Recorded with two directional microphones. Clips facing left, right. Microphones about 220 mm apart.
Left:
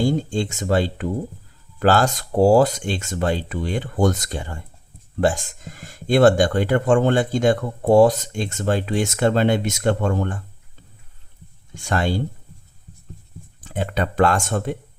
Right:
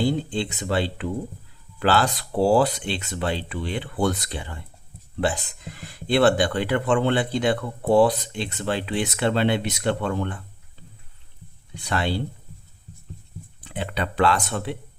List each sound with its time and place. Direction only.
0.0 s speech: 45° left (ahead or behind)
11.7 s speech: 45° left (ahead or behind)
13.6 s speech: 45° left (ahead or behind)